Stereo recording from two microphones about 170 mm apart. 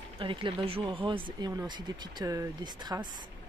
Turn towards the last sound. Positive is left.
turn(degrees=-25)  # may be behind; listen again after turning